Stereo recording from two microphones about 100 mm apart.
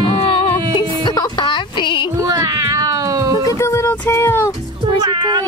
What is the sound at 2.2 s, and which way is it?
Cat, 35° right (ahead or behind).